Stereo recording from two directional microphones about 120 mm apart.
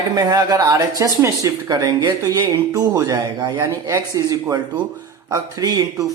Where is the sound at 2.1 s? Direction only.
25° right (ahead or behind).